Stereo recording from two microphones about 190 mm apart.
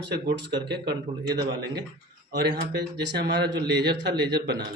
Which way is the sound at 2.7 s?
60° right (ahead or behind).